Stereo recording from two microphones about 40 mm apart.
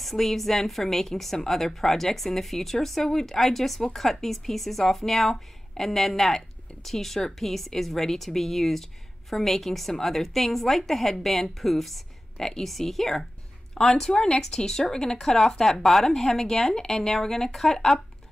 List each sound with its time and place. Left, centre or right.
0.0 s a woman's voice: centre